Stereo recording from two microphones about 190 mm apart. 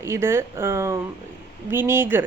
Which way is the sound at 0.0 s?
15° right (ahead or behind).